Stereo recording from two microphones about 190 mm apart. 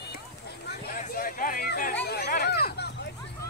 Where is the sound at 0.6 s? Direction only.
45° left (ahead or behind).